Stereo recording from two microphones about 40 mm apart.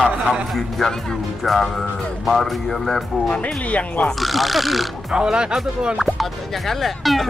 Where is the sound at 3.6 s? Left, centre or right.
Left.